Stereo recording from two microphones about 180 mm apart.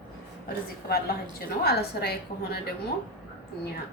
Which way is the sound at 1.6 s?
60° left (ahead or behind).